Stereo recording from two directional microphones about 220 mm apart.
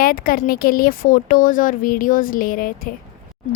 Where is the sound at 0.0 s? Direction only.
40° left (ahead or behind).